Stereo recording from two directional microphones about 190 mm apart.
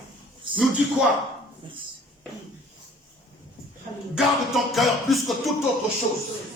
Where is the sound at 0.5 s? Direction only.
25° right (ahead or behind).